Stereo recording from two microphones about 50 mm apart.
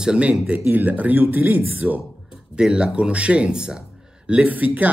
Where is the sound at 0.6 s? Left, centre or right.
Right.